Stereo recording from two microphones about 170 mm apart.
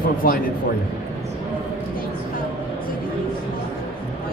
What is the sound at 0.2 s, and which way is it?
Speech, 60° left (ahead or behind).